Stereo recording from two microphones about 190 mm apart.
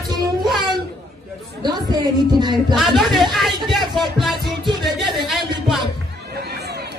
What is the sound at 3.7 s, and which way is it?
Music, centre (ahead or behind).